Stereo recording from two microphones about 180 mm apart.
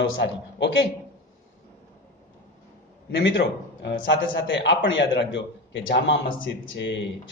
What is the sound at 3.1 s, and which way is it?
Speech, 90° left.